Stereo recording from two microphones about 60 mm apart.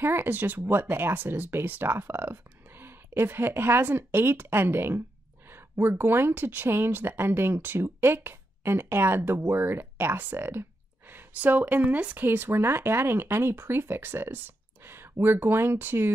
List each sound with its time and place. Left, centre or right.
0.0 s speech: right